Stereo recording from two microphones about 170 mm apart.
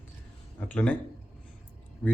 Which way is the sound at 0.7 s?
10° left (ahead or behind).